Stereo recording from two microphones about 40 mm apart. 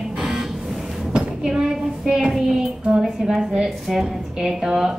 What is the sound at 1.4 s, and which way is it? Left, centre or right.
A woman's voice, centre.